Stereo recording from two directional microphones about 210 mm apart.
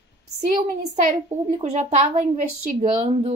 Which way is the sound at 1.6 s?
35° right (ahead or behind).